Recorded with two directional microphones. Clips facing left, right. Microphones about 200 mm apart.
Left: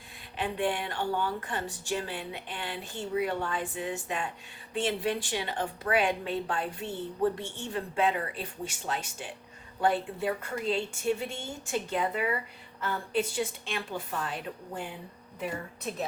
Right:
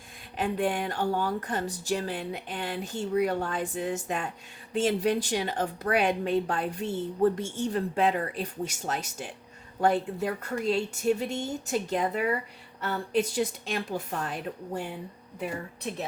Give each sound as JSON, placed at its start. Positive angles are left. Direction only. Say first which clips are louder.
{"t": 0.3, "sound": "a woman's voice", "louder": "right 3 dB", "side_deg": -40}